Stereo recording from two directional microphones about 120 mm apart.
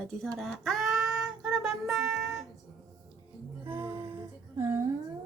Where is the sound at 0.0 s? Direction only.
5° left (ahead or behind).